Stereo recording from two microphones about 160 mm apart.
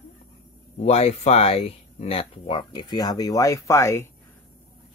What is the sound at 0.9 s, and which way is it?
Speech, 40° left (ahead or behind).